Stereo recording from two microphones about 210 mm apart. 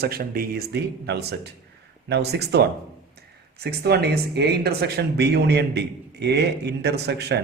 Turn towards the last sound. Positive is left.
turn(degrees=-50)  # may be behind; listen again after turning